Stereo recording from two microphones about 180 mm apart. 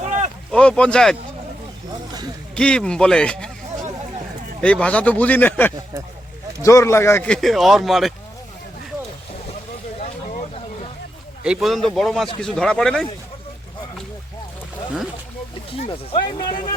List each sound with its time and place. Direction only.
0.0 s boat: 40° right (ahead or behind)
0.5 s speech: 5° left (ahead or behind)
2.6 s speech: 5° left (ahead or behind)
4.6 s speech: 5° left (ahead or behind)
11.4 s speech: 5° right (ahead or behind)
15.9 s speech: 25° left (ahead or behind)